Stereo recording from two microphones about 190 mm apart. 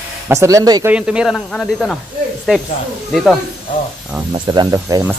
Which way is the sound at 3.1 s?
Centre (ahead or behind).